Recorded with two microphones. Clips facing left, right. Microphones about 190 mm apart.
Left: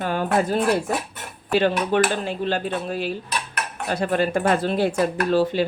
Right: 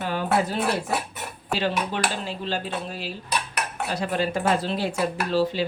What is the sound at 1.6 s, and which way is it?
Speech, 55° left (ahead or behind).